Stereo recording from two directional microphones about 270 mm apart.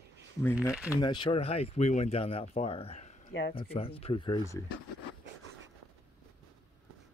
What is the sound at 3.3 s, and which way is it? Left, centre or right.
Speech, left.